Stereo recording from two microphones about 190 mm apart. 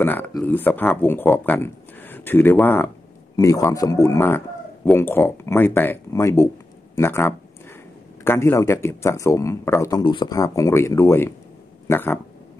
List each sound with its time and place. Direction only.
0.0 s a man's voice: 10° left (ahead or behind)